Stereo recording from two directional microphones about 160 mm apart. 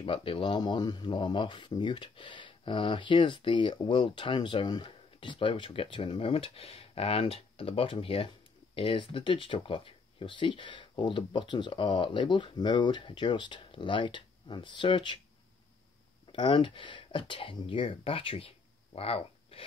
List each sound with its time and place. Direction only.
0.0 s speech: 35° left (ahead or behind)
16.3 s speech: 30° left (ahead or behind)